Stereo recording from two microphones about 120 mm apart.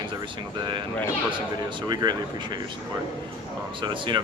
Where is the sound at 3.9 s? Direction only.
40° right (ahead or behind).